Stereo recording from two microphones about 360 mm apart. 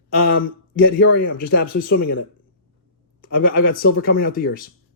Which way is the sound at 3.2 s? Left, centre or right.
Left.